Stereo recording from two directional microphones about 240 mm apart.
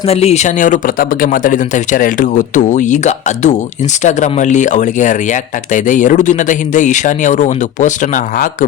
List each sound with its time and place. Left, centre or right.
0.1 s speech: left